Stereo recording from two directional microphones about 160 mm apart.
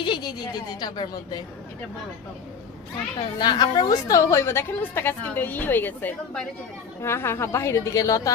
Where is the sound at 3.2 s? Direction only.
30° left (ahead or behind).